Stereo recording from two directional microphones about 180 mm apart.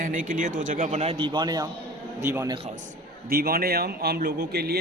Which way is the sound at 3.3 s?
55° right (ahead or behind).